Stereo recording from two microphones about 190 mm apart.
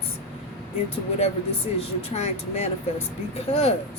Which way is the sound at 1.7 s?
35° left (ahead or behind).